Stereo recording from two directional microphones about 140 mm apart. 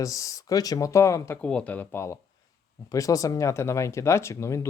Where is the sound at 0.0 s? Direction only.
25° left (ahead or behind).